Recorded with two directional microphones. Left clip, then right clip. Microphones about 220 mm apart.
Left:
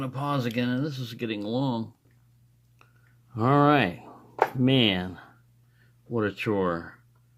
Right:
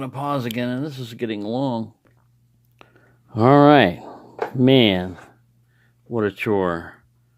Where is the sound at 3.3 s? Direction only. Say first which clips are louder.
Right 9 dB; 25° right (ahead or behind).